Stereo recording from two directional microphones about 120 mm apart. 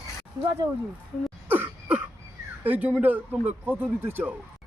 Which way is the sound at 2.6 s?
15° right (ahead or behind).